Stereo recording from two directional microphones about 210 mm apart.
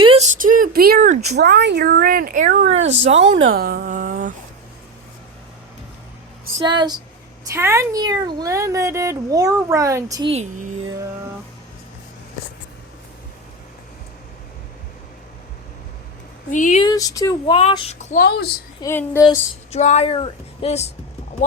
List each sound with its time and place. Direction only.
0.0 s a sound: 30° right (ahead or behind)
3.2 s speech: 65° right (ahead or behind)
3.5 s a sound: 45° right (ahead or behind)
6.6 s a woman's voice: 20° right (ahead or behind)
10.3 s a sound: 35° right (ahead or behind)
16.5 s speech: 35° left (ahead or behind)
16.8 s speech: 15° left (ahead or behind)
18.2 s a woman's voice: 50° left (ahead or behind)
18.8 s a woman's voice: 10° left (ahead or behind)
19.7 s speech: 30° left (ahead or behind)